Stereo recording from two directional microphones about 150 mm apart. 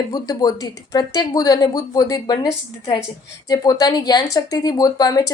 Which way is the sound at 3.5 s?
25° left (ahead or behind).